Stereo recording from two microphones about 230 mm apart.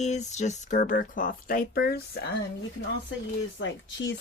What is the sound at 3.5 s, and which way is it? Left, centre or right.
Speech, left.